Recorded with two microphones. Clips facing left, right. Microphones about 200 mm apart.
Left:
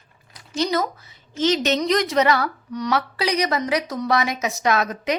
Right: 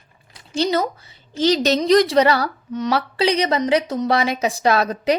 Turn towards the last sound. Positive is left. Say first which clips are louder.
# right 4 dB
turn(degrees=-30)  # may be behind; listen again after turning